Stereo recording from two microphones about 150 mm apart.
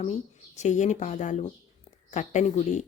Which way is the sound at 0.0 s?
50° left (ahead or behind).